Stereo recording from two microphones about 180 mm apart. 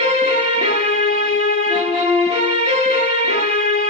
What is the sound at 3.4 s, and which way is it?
Music, 50° left (ahead or behind).